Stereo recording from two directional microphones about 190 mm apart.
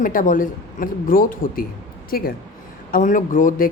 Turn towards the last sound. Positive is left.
turn(degrees=45)  # may be behind; listen again after turning